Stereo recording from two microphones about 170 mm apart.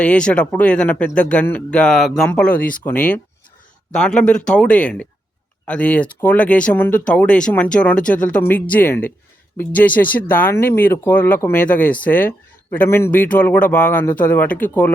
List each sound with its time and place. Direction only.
0.0 s speech: 5° left (ahead or behind)